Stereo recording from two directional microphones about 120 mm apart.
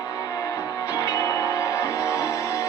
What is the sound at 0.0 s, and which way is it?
Music, 30° left (ahead or behind).